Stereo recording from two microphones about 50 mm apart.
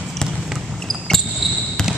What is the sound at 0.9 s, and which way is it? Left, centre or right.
Basketball bounce, centre.